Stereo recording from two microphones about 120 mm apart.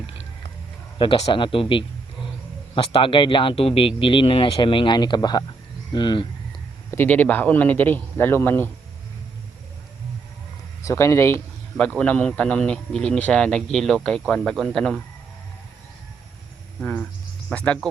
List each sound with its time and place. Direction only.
0.9 s speech: 45° left (ahead or behind)
6.9 s speech: 15° left (ahead or behind)
10.8 s speech: 25° left (ahead or behind)
11.8 s speech: 10° left (ahead or behind)
17.5 s speech: 10° left (ahead or behind)